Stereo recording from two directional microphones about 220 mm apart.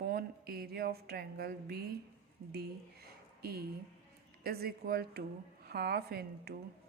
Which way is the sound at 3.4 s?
45° right (ahead or behind).